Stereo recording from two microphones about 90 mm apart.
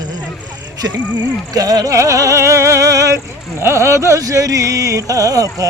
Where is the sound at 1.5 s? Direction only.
45° right (ahead or behind).